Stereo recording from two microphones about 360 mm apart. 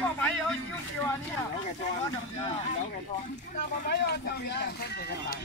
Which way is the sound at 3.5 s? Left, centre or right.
Left.